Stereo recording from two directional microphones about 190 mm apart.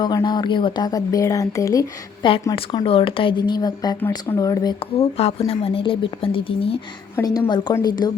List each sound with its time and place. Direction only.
0.0 s speech: 20° left (ahead or behind)
2.6 s speech: 30° left (ahead or behind)
4.8 s speech: 30° left (ahead or behind)